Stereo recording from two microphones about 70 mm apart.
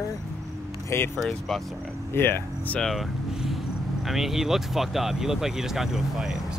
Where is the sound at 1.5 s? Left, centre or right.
Centre.